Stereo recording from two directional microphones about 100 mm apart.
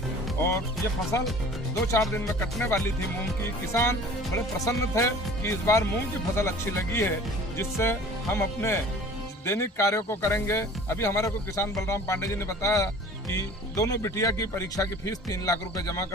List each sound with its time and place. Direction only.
0.3 s speech: 25° left (ahead or behind)
3.7 s speech: 25° left (ahead or behind)